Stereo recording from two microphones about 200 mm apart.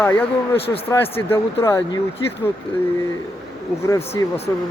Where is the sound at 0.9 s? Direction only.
10° left (ahead or behind).